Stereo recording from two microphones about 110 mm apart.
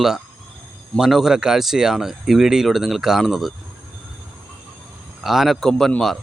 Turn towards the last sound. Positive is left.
turn(degrees=0)  # may be behind; listen again after turning